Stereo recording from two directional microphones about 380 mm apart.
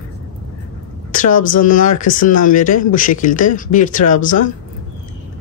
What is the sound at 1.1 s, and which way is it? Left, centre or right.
Speech, left.